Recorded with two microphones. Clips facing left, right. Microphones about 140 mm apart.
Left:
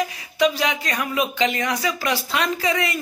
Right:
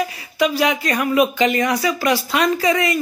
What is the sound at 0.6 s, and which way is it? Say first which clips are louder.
Speech: right 5 dB; 60° right (ahead or behind).